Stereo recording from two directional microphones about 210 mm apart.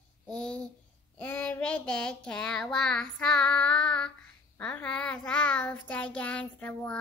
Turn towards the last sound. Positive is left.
turn(degrees=5)  # may be behind; listen again after turning